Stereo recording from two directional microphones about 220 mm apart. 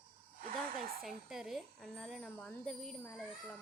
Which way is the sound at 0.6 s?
40° right (ahead or behind).